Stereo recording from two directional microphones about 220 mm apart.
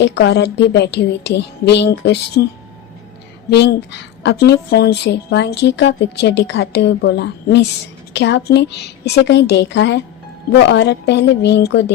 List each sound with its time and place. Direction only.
0.0 s a woman's voice: 50° left (ahead or behind)
3.5 s a woman's voice: 50° left (ahead or behind)